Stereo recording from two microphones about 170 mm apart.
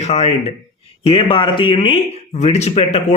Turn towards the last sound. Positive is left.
turn(degrees=40)  # may be behind; listen again after turning